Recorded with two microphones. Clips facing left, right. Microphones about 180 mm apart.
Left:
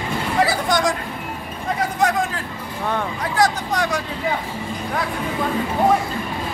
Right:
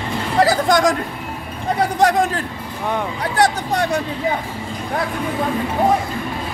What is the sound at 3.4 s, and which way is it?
Speech, 30° right (ahead or behind).